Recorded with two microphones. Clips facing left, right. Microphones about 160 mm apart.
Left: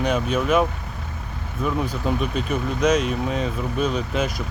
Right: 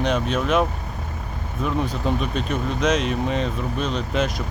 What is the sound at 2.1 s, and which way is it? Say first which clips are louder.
Speech: even; 5° left (ahead or behind).